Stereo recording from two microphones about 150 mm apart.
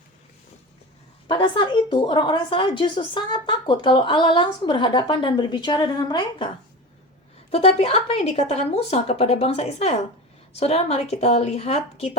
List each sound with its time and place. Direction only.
1.3 s a woman's voice: 35° left (ahead or behind)
7.5 s a woman's voice: 45° left (ahead or behind)